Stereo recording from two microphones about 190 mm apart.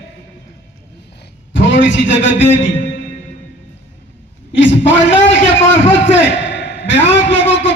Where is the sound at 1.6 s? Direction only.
75° left (ahead or behind).